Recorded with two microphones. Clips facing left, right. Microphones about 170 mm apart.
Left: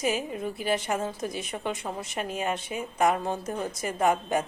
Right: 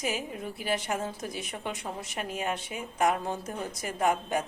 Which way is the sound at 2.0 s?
20° left (ahead or behind).